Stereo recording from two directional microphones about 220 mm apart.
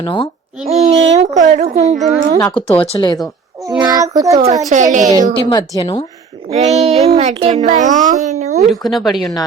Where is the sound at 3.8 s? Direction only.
15° right (ahead or behind).